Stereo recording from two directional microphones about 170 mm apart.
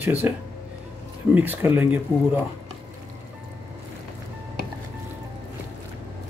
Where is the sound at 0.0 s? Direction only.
10° right (ahead or behind).